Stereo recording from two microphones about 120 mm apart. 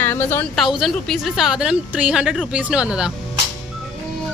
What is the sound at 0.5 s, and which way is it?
A woman's voice, centre (ahead or behind).